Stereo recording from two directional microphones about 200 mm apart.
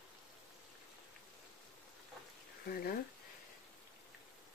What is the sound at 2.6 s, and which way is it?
Speech, 50° left (ahead or behind).